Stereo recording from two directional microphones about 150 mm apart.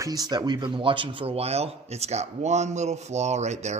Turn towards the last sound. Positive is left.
turn(degrees=-50)  # may be behind; listen again after turning